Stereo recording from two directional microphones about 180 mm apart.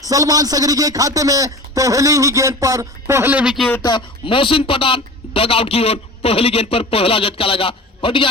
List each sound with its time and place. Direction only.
0.0 s a man's voice: 20° right (ahead or behind); by 3.7 s 5° right (ahead or behind)
3.8 s a man's voice: 30° left (ahead or behind)